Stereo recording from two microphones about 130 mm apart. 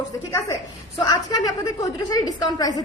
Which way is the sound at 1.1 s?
30° left (ahead or behind).